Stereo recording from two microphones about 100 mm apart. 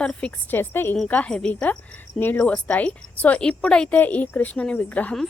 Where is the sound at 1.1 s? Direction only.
10° left (ahead or behind).